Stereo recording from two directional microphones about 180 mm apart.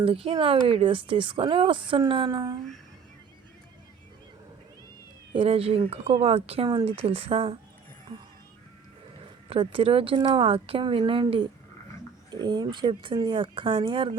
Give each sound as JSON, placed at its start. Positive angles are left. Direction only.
{"t": 0.0, "sound": "speech", "side_deg": -30}
{"t": 5.3, "sound": "a woman's voice", "side_deg": -30}
{"t": 9.5, "sound": "speech", "side_deg": -30}